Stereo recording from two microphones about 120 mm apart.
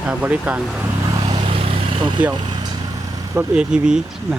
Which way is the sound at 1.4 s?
50° right (ahead or behind).